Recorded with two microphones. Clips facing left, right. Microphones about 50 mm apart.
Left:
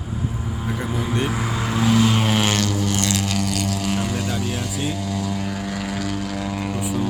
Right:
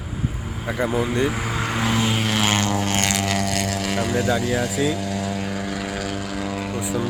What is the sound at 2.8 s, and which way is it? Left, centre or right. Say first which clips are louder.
Didgeridoo: even; right.